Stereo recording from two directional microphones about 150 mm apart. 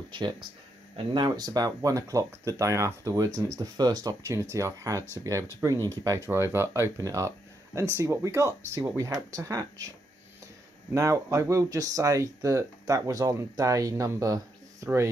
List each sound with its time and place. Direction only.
0.9 s speech: 30° right (ahead or behind)